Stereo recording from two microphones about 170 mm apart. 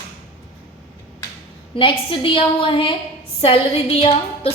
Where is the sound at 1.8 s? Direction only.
30° left (ahead or behind).